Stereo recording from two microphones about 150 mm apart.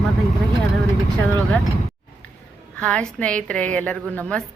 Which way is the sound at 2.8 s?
5° left (ahead or behind).